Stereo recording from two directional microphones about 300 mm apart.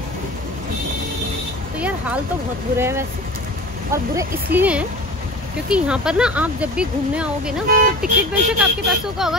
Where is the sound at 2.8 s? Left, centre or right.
Centre.